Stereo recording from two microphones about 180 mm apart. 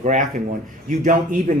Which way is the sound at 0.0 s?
45° right (ahead or behind).